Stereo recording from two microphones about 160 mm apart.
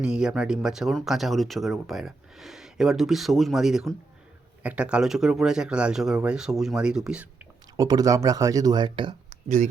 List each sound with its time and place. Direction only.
0.0 s speech: 5° right (ahead or behind)
7.8 s speech: 25° right (ahead or behind)
9.3 s a sound: 45° right (ahead or behind)